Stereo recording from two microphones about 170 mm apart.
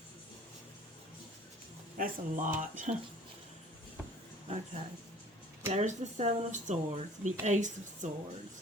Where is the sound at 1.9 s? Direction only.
50° right (ahead or behind).